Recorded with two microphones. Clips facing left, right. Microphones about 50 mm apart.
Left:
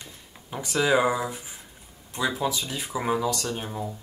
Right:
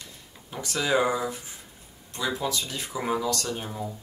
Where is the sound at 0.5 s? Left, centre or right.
Centre.